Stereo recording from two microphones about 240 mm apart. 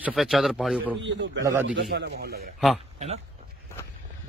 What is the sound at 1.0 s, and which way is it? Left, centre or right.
Speech, right.